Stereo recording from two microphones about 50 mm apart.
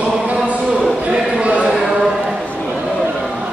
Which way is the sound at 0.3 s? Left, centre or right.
Right.